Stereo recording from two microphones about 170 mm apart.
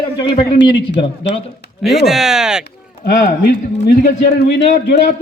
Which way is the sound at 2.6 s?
75° left (ahead or behind).